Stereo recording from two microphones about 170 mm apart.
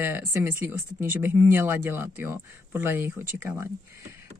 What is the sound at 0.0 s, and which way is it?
Speech, 15° right (ahead or behind).